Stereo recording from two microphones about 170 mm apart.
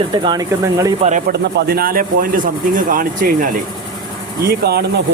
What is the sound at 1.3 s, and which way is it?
Speech, 70° right (ahead or behind).